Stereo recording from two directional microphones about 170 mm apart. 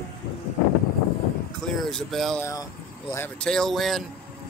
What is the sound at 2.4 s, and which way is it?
Speech, 15° left (ahead or behind).